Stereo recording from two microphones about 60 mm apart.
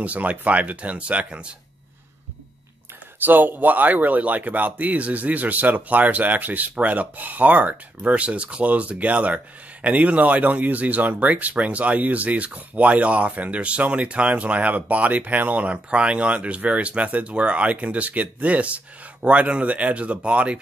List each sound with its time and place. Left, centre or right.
0.0 s speech: right
3.3 s speech: right